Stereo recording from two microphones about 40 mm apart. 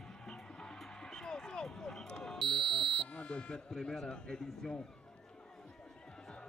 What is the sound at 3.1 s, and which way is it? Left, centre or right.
Speech, left.